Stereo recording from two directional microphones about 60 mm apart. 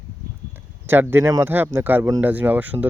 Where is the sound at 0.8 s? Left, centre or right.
Right.